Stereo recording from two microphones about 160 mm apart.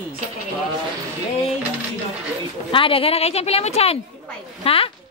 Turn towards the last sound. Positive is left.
turn(degrees=35)  # may be behind; listen again after turning